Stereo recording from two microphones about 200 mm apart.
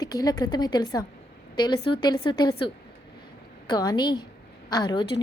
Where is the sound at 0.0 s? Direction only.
20° left (ahead or behind).